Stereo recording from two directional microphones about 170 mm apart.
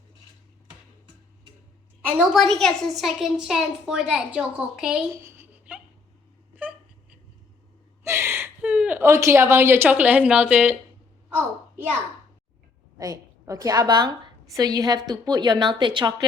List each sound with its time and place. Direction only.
2.1 s a child's voice: centre (ahead or behind)
5.2 s a sound: 10° right (ahead or behind)
6.6 s wail: 5° right (ahead or behind)
8.0 s a woman's voice: 15° right (ahead or behind)
11.3 s a sound: 10° right (ahead or behind)
13.0 s a woman's voice: 20° right (ahead or behind)